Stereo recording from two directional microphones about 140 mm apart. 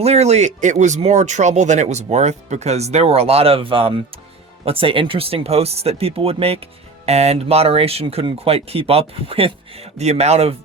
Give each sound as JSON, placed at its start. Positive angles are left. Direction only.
{"t": 0.0, "sound": "speech", "side_deg": -50}